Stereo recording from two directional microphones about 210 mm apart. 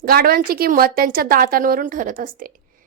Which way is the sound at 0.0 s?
45° right (ahead or behind).